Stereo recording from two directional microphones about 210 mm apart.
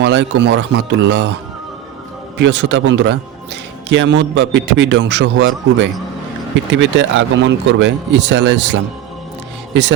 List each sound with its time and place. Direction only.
0.0 s a man's voice: 55° right (ahead or behind)
2.4 s a man's voice: 60° right (ahead or behind)